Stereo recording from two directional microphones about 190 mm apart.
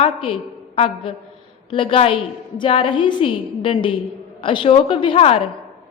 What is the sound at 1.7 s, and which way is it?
A woman's voice, 30° left (ahead or behind).